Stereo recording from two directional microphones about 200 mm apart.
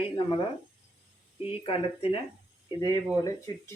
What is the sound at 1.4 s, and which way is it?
Speech, 30° left (ahead or behind).